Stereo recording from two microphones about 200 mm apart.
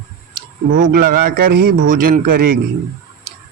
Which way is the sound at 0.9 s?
45° right (ahead or behind).